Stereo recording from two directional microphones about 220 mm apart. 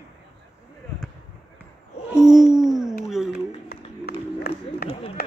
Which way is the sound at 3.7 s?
45° left (ahead or behind).